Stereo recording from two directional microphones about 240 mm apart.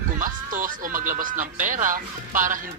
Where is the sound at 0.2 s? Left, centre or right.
Right.